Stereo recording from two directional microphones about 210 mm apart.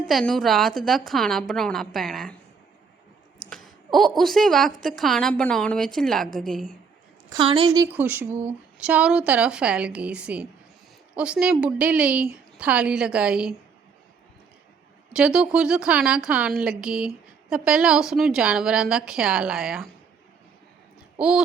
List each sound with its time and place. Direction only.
0.1 s a woman's voice: centre (ahead or behind)
3.5 s a woman's voice: centre (ahead or behind)
7.3 s a woman's voice: 25° right (ahead or behind)
7.9 s a woman's voice: 10° right (ahead or behind)
15.1 s a woman's voice: 5° right (ahead or behind)
21.2 s a woman's voice: 5° right (ahead or behind)